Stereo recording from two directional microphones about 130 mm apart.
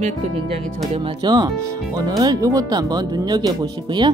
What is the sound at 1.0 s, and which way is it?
Speech, 35° right (ahead or behind).